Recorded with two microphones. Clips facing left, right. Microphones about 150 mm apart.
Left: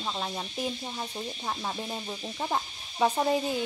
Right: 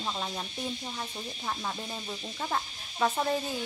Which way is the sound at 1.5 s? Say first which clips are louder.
Left 1 dB; 15° left (ahead or behind).